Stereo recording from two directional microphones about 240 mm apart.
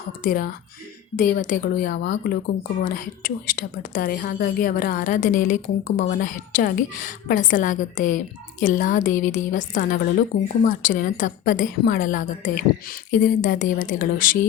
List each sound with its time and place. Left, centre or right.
0.2 s a woman's voice: left